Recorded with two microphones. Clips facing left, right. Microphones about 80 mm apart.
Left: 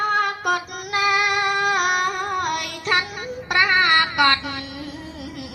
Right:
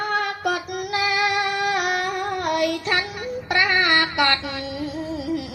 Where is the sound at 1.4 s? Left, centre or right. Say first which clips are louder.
Left 2 dB; left.